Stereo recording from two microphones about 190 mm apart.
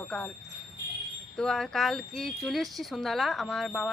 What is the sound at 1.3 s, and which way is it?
Speech, centre (ahead or behind).